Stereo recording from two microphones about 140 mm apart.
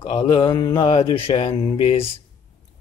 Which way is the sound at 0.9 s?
40° left (ahead or behind).